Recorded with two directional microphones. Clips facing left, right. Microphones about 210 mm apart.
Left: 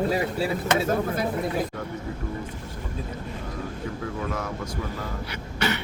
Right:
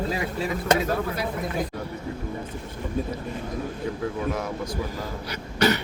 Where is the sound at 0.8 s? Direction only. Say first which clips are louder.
Left 2 dB; 45° left (ahead or behind).